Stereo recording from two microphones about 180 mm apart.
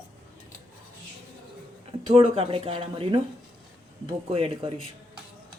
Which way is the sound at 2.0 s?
30° right (ahead or behind).